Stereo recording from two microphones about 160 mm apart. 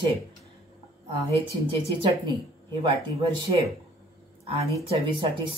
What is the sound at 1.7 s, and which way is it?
Speech, 30° right (ahead or behind).